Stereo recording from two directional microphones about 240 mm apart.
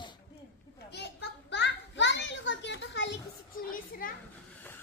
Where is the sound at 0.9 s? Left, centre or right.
Left.